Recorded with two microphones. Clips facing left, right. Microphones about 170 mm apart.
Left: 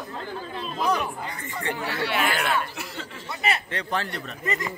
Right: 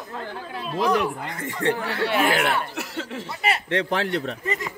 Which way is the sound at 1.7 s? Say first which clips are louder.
Right 3 dB; 45° right (ahead or behind).